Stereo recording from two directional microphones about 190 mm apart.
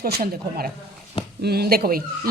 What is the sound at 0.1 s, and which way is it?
A woman's voice, 50° right (ahead or behind).